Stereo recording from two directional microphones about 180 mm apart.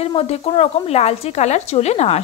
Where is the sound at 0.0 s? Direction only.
35° left (ahead or behind).